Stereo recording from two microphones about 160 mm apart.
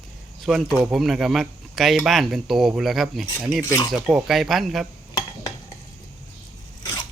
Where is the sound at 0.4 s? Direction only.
Centre (ahead or behind).